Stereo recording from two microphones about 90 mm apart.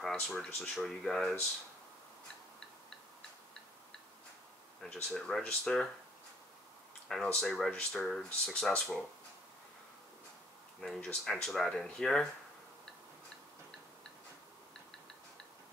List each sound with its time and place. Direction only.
0.0 s speech: 5° left (ahead or behind)
5.1 s speech: 5° left (ahead or behind)
7.1 s speech: 5° left (ahead or behind)
10.8 s speech: 10° left (ahead or behind)